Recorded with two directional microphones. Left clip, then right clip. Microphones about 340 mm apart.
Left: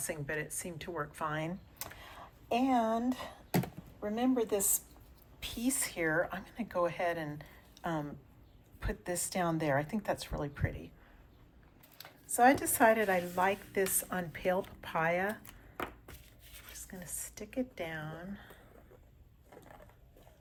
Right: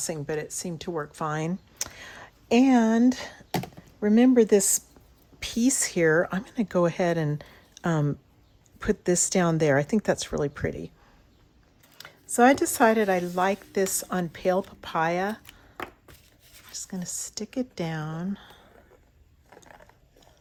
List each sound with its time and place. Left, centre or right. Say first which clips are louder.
0.0 s speech: right 7 dB; centre
2.5 s speech: right 10 dB; right
2.7 s speech: right 8 dB; right
11.9 s speech: right 7 dB; right
16.8 s speech: right 11 dB; centre